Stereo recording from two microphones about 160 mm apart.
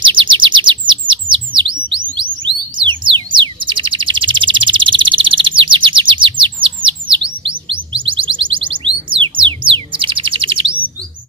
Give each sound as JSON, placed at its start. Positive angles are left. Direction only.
{"t": 0.0, "sound": "bird", "side_deg": -30}
{"t": 2.4, "sound": "a sound", "side_deg": -30}
{"t": 3.3, "sound": "bird", "side_deg": -30}